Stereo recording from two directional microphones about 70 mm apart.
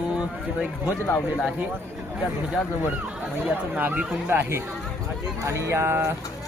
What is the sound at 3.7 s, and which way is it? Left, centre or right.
A man's voice, right.